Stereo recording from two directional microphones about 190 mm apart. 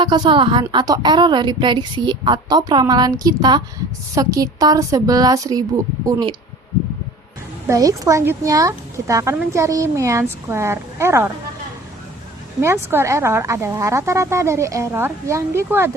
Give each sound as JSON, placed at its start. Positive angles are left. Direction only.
{"t": 0.0, "sound": "a woman's voice", "side_deg": -25}
{"t": 7.7, "sound": "speech", "side_deg": -20}
{"t": 12.6, "sound": "speech", "side_deg": -15}